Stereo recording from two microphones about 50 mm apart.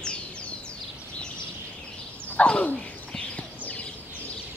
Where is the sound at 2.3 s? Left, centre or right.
Left.